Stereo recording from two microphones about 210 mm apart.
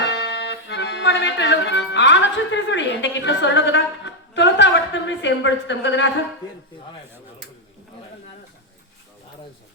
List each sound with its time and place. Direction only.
0.0 s accordion: 55° left (ahead or behind)